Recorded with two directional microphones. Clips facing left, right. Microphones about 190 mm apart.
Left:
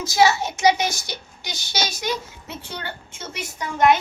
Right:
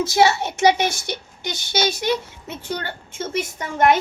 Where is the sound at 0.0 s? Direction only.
30° right (ahead or behind).